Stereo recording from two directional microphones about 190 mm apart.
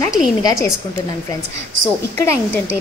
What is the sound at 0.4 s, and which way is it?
Speech, 20° left (ahead or behind).